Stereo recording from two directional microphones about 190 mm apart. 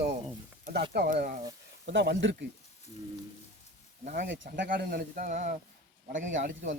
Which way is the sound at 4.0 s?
50° right (ahead or behind).